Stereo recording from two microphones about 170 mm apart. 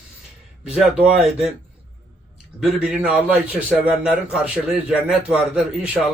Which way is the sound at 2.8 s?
5° right (ahead or behind).